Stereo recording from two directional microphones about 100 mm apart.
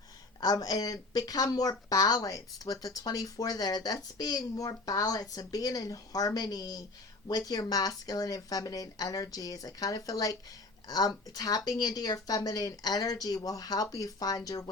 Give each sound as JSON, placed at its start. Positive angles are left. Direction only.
{"t": 0.3, "sound": "a woman's voice", "side_deg": 40}